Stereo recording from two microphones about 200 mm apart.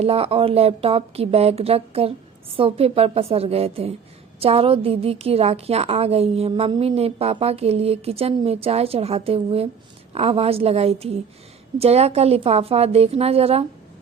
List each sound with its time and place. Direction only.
0.0 s a woman's voice: 30° right (ahead or behind)